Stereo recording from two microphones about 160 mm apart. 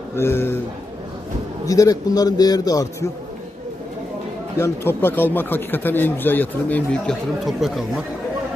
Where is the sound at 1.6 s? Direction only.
20° left (ahead or behind).